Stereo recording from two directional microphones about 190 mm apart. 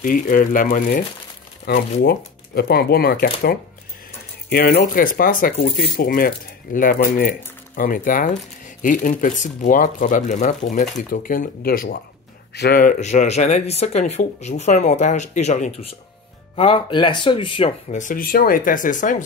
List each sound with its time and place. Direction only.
0.0 s speech: 45° left (ahead or behind)
1.7 s speech: 55° left (ahead or behind); by 18.0 s 30° left (ahead or behind)
18.0 s speech: 50° left (ahead or behind)